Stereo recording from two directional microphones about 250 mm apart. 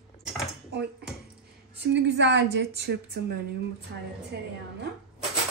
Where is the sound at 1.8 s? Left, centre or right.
Right.